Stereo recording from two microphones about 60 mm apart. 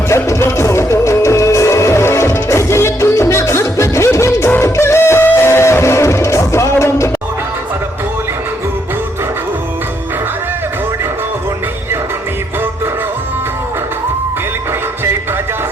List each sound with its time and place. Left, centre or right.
0.1 s music: left